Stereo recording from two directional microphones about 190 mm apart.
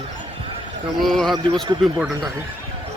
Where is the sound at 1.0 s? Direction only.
Centre (ahead or behind).